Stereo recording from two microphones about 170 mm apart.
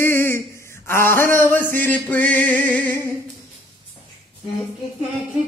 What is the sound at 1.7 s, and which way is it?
Speech, 10° left (ahead or behind).